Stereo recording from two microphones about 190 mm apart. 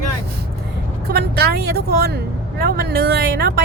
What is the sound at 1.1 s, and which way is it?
Speech, 55° right (ahead or behind).